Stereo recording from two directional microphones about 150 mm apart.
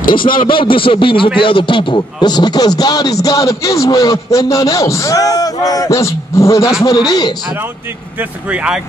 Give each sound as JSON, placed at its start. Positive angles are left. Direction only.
{"t": 0.1, "sound": "a man's voice", "side_deg": 35}
{"t": 8.2, "sound": "speech", "side_deg": -10}